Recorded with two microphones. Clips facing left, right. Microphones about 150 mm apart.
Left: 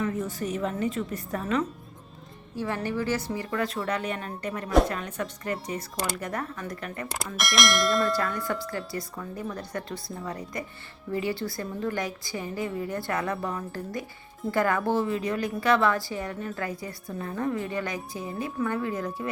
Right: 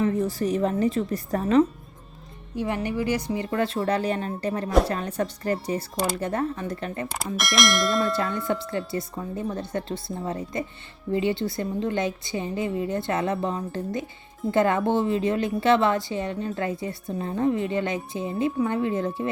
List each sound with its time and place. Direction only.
0.0 s a woman's voice: 35° right (ahead or behind)
2.6 s a woman's voice: 20° right (ahead or behind)
7.3 s speech: centre (ahead or behind)
8.1 s a woman's voice: 25° right (ahead or behind)